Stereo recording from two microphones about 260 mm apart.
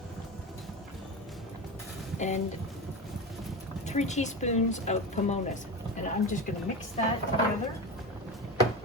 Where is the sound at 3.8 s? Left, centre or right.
Left.